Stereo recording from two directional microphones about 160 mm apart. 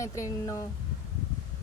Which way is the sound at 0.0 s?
20° left (ahead or behind).